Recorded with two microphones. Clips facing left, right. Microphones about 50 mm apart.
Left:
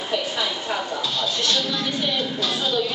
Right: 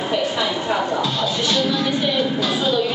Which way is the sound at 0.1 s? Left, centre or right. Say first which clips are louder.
Right 3 dB; centre.